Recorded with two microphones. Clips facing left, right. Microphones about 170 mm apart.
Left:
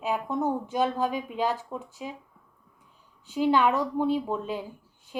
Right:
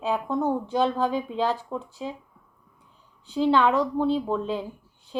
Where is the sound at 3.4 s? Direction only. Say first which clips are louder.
Right 2 dB; 15° left (ahead or behind).